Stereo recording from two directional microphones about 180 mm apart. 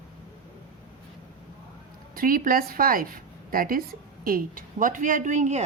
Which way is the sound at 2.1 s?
50° right (ahead or behind).